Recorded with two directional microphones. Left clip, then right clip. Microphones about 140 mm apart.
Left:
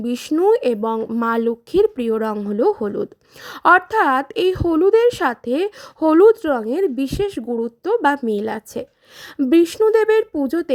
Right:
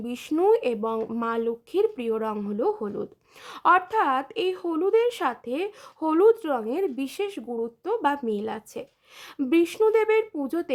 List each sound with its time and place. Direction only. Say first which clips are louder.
0.0 s speech: left 6 dB; 40° left (ahead or behind)
1.2 s speech: left 10 dB; 40° left (ahead or behind)